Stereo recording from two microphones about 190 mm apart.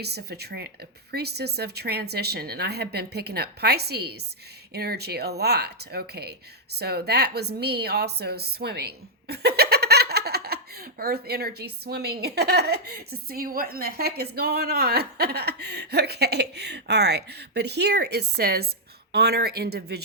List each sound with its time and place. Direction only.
0.0 s speech: 60° right (ahead or behind)